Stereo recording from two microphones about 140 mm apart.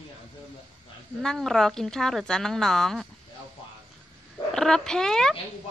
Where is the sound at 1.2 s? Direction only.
Centre (ahead or behind).